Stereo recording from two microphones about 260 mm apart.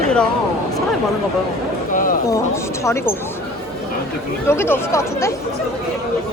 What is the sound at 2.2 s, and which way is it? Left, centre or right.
Speech, centre.